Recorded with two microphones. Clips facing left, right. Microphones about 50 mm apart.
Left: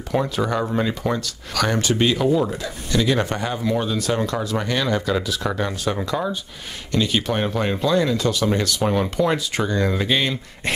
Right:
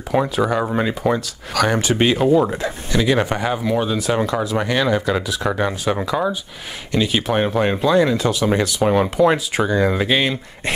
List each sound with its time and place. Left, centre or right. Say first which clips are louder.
0.1 s speech: right 4 dB; centre
2.0 s speech: right 4 dB; right
2.9 s speech: right 2 dB; centre